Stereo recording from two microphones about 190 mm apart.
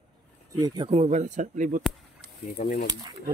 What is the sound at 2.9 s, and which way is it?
Speech, 20° right (ahead or behind).